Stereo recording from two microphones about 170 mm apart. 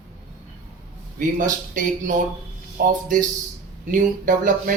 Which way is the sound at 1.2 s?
50° right (ahead or behind).